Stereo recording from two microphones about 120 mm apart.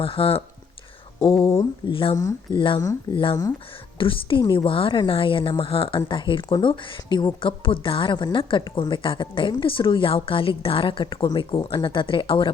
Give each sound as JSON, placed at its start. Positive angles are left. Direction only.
{"t": 0.0, "sound": "a woman's voice", "side_deg": 50}
{"t": 2.1, "sound": "speech", "side_deg": 30}
{"t": 2.6, "sound": "a woman's voice", "side_deg": 45}
{"t": 3.9, "sound": "a woman's voice", "side_deg": 45}